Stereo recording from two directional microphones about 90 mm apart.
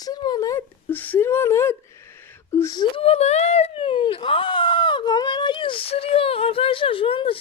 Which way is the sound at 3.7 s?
90° left.